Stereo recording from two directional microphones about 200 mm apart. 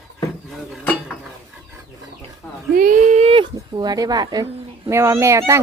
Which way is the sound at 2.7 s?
45° right (ahead or behind).